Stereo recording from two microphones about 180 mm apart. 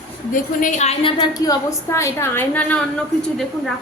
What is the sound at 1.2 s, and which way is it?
A woman's voice, 20° left (ahead or behind).